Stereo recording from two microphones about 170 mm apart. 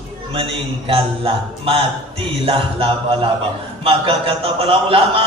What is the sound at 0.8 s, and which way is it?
A man's voice, 30° right (ahead or behind).